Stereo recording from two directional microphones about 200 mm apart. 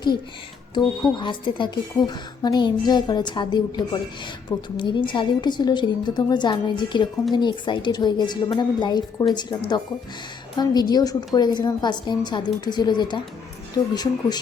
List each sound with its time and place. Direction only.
1.1 s a woman's voice: 25° left (ahead or behind)